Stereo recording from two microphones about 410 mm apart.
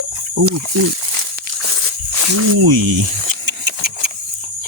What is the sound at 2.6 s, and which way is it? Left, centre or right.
Speech, right.